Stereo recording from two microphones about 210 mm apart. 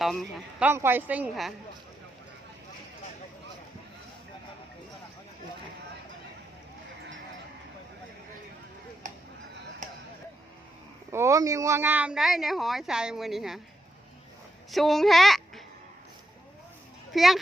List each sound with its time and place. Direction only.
0.0 s speech: centre (ahead or behind)
0.7 s a woman's voice: 10° right (ahead or behind)
9.0 s a sound: 40° right (ahead or behind)
11.1 s speech: 15° right (ahead or behind)
14.7 s speech: centre (ahead or behind)
17.1 s speech: centre (ahead or behind)